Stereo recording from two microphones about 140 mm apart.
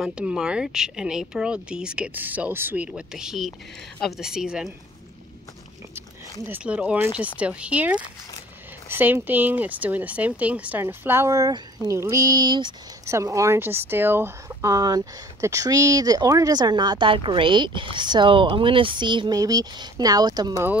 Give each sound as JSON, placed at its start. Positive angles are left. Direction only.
{"t": 0.0, "sound": "speech", "side_deg": -5}
{"t": 6.4, "sound": "speech", "side_deg": -10}
{"t": 13.0, "sound": "speech", "side_deg": -20}